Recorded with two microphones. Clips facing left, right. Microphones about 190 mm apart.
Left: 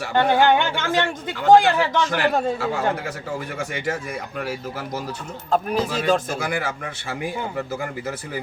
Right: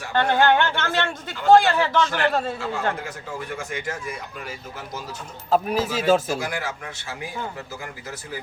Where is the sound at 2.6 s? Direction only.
60° left (ahead or behind).